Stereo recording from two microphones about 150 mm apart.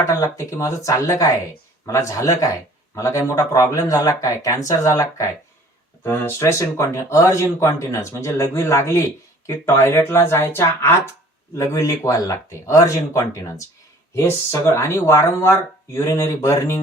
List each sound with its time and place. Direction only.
0.1 s speech: 20° left (ahead or behind)